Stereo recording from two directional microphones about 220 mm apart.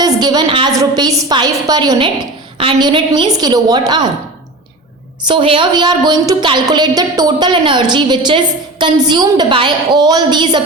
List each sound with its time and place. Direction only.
0.0 s a woman's voice: 20° right (ahead or behind)
5.2 s a woman's voice: 20° right (ahead or behind)